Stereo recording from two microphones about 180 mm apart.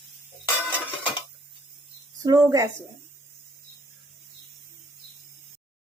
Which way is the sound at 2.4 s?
15° right (ahead or behind).